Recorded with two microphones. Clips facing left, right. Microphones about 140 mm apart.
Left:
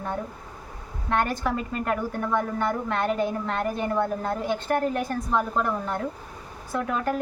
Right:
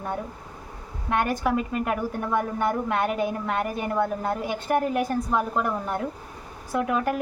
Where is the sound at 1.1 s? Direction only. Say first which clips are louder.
Right 1 dB; 10° right (ahead or behind).